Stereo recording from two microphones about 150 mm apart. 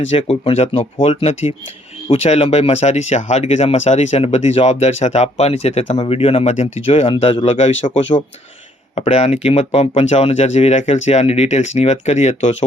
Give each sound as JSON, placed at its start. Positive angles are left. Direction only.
{"t": 0.1, "sound": "speech", "side_deg": 40}
{"t": 9.0, "sound": "speech", "side_deg": 50}